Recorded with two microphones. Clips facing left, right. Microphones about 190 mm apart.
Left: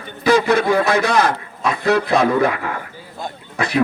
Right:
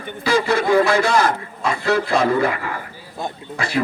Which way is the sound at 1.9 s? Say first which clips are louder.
Left 2 dB; 60° left (ahead or behind).